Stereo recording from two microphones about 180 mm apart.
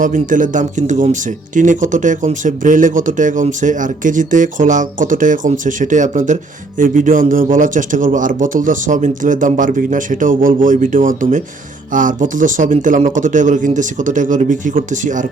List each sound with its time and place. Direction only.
0.0 s speech: 45° right (ahead or behind)